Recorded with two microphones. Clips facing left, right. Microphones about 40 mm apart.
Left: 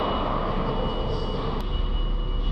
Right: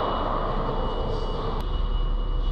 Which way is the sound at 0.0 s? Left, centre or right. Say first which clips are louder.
Even; left.